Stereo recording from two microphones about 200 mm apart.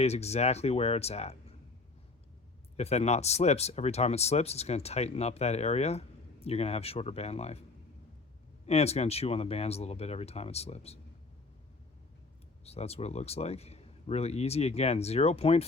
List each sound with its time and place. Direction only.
0.0 s speech: 30° left (ahead or behind)
2.7 s speech: 30° left (ahead or behind)
8.6 s speech: 30° left (ahead or behind)
12.6 s speech: 30° left (ahead or behind)